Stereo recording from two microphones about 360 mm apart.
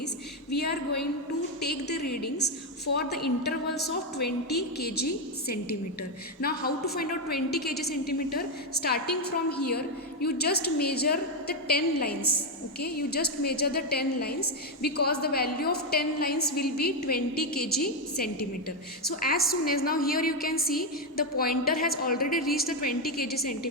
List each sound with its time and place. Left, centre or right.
0.5 s a woman's voice: left
2.2 s a woman's voice: left
19.0 s a woman's voice: left